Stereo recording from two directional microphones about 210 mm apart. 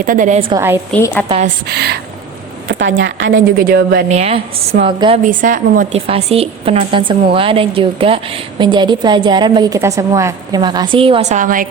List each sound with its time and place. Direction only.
0.0 s a woman's voice: 40° right (ahead or behind)
0.5 s a woman's voice: 10° right (ahead or behind)
1.6 s a woman's voice: 50° right (ahead or behind)
2.6 s a woman's voice: 65° right (ahead or behind)
3.3 s a woman's voice: 45° right (ahead or behind)
4.2 s a woman's voice: 30° right (ahead or behind)
5.2 s a woman's voice: 40° right (ahead or behind)